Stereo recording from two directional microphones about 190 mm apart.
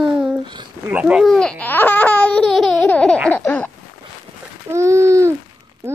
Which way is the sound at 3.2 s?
10° left (ahead or behind).